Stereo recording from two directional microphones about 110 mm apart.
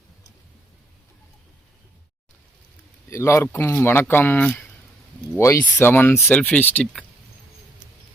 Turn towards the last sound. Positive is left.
turn(degrees=15)  # may be behind; listen again after turning